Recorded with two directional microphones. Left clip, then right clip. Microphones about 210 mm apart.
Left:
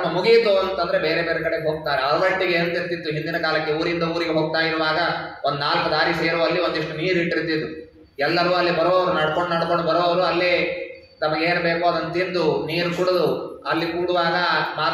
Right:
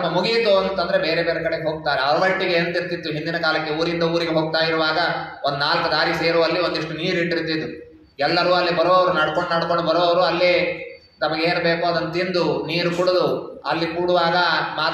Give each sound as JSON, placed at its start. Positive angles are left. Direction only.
{"t": 0.1, "sound": "a man's voice", "side_deg": -55}